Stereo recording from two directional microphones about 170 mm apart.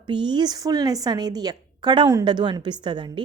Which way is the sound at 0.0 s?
25° right (ahead or behind).